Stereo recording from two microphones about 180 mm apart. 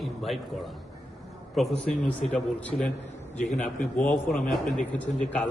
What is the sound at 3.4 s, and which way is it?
Speech, 45° left (ahead or behind).